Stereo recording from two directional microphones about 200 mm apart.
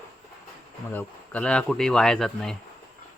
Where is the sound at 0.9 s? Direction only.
5° left (ahead or behind).